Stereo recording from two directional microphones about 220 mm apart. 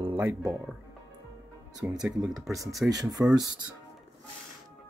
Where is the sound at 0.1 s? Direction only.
10° right (ahead or behind).